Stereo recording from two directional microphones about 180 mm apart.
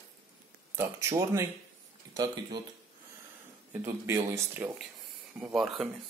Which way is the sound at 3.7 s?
10° right (ahead or behind).